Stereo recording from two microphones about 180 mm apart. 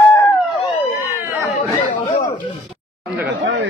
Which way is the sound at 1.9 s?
40° left (ahead or behind).